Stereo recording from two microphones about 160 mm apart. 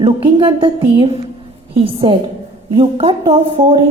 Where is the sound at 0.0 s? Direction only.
35° right (ahead or behind).